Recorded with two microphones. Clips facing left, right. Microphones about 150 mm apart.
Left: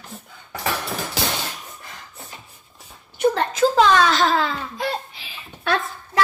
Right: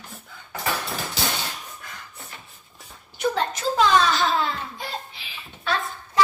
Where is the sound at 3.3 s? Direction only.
75° left (ahead or behind).